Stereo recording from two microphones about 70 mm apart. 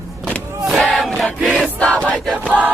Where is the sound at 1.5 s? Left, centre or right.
Centre.